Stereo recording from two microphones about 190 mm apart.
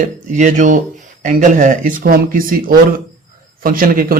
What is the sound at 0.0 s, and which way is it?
A man's voice, 40° right (ahead or behind).